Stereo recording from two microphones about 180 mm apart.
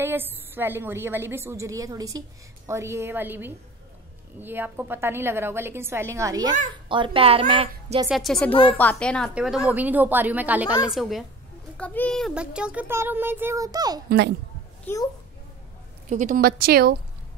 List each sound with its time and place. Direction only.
0.0 s a woman's voice: 10° right (ahead or behind); by 8.1 s 30° right (ahead or behind)
8.1 s a woman's voice: centre (ahead or behind)
10.7 s a woman's voice: 20° left (ahead or behind)
11.0 s a woman's voice: centre (ahead or behind); by 14.0 s 20° right (ahead or behind)
14.0 s speech: 70° right (ahead or behind)
14.9 s speech: 10° left (ahead or behind)
16.1 s a woman's voice: 45° right (ahead or behind); by 16.9 s 60° right (ahead or behind)